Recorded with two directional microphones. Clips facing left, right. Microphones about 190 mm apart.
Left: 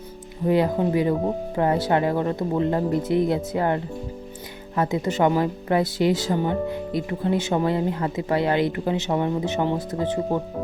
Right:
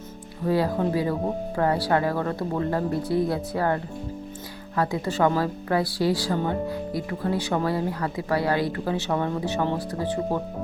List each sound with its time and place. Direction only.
0.4 s a woman's voice: 20° left (ahead or behind)
4.8 s a woman's voice: 20° left (ahead or behind)